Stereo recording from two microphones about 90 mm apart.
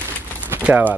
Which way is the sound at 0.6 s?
20° right (ahead or behind).